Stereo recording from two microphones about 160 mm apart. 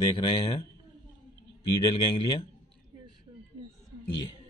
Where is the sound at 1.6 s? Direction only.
25° left (ahead or behind).